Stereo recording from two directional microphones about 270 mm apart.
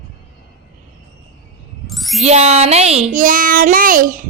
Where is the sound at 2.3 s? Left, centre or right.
Right.